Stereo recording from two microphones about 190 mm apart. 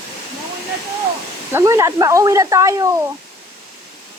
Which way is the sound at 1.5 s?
15° right (ahead or behind).